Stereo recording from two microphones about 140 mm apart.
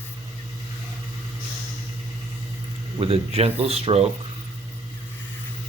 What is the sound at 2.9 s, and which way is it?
Speech, 45° right (ahead or behind).